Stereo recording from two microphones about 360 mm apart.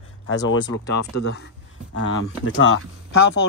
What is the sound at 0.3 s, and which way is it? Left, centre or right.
Speech, left.